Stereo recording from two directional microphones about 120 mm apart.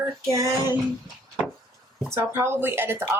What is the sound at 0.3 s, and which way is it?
Speech, 30° right (ahead or behind).